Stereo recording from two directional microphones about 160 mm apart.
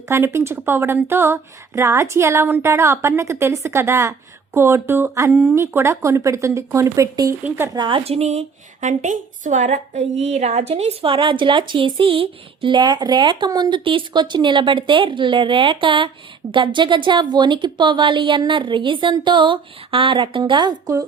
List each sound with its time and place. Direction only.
0.1 s a woman's voice: 15° right (ahead or behind)
7.8 s a woman's voice: 30° right (ahead or behind)